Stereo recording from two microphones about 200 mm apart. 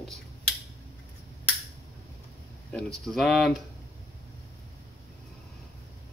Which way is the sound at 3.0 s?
Centre (ahead or behind).